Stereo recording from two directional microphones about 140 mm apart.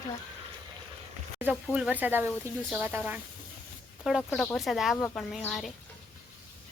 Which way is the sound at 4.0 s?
5° right (ahead or behind).